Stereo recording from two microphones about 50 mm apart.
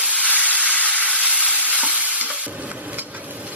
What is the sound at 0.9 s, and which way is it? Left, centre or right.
Stir, right.